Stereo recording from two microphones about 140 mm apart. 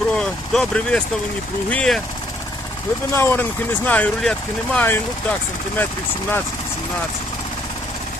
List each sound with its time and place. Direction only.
0.1 s vehicle: 5° left (ahead or behind)
1.7 s speech: 5° left (ahead or behind)
3.1 s speech: 20° left (ahead or behind)